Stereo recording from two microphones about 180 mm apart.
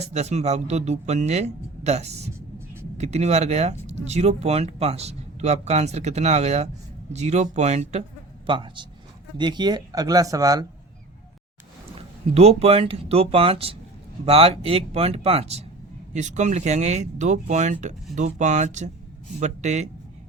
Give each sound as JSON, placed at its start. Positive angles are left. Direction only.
{"t": 0.0, "sound": "speech", "side_deg": -40}
{"t": 8.4, "sound": "speech", "side_deg": -25}
{"t": 11.9, "sound": "speech", "side_deg": -35}